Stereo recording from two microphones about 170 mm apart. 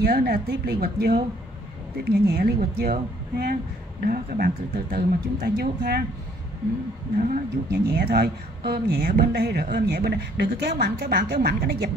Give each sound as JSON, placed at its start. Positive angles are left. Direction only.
{"t": 0.0, "sound": "a woman's voice", "side_deg": -65}
{"t": 7.2, "sound": "speech", "side_deg": -60}